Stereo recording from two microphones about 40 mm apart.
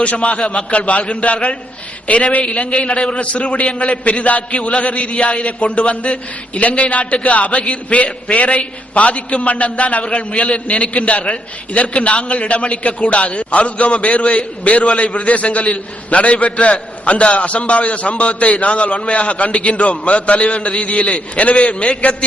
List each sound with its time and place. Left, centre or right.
0.0 s a man's voice: left